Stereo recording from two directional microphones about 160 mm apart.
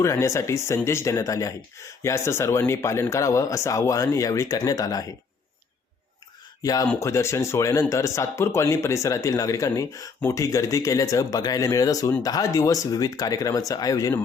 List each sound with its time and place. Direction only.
0.0 s speech: 20° left (ahead or behind)
6.6 s speech: 20° left (ahead or behind)